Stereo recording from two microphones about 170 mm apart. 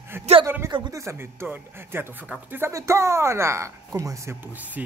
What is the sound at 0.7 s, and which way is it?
Speech, 25° right (ahead or behind).